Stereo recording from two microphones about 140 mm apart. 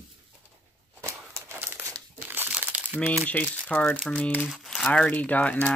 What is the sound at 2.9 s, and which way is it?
Speech, 10° left (ahead or behind).